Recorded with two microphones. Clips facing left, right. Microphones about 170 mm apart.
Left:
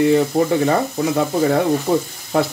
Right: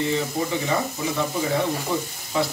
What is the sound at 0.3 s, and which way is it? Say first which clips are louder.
Speech: left 9 dB; 65° left (ahead or behind).